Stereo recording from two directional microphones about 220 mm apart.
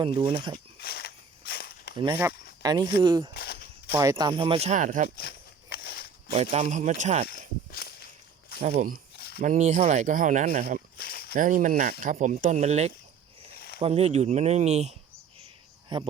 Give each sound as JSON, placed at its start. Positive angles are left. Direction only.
{"t": 0.0, "sound": "speech", "side_deg": -25}
{"t": 0.8, "sound": "walk", "side_deg": 45}
{"t": 2.6, "sound": "speech", "side_deg": -15}
{"t": 3.3, "sound": "walk", "side_deg": 45}
{"t": 3.9, "sound": "speech", "side_deg": -15}
{"t": 5.0, "sound": "walk", "side_deg": 45}
{"t": 6.3, "sound": "speech", "side_deg": -30}
{"t": 7.3, "sound": "walk", "side_deg": 45}
{"t": 8.6, "sound": "speech", "side_deg": -40}
{"t": 9.1, "sound": "a sound", "side_deg": 45}
{"t": 9.4, "sound": "speech", "side_deg": -35}
{"t": 10.9, "sound": "a sound", "side_deg": 45}
{"t": 11.3, "sound": "speech", "side_deg": -35}